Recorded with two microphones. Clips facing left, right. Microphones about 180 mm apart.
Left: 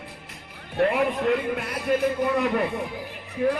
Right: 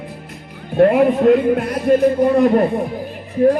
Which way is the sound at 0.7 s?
45° right (ahead or behind).